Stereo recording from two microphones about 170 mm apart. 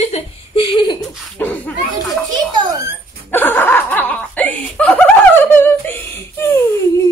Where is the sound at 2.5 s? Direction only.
20° right (ahead or behind).